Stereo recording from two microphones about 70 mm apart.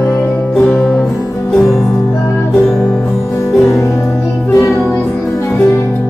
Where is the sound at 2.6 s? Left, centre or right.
Centre.